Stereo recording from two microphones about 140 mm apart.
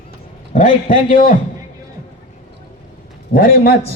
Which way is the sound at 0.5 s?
65° left (ahead or behind).